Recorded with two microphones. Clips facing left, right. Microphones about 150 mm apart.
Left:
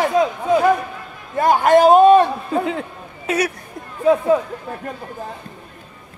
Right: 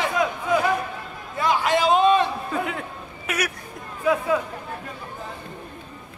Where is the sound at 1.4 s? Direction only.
50° left (ahead or behind).